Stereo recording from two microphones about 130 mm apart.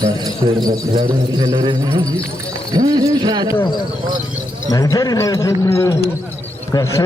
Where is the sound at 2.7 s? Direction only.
30° right (ahead or behind).